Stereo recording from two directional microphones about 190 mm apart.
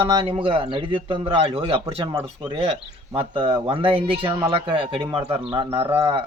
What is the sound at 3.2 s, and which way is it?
Speech, 25° right (ahead or behind).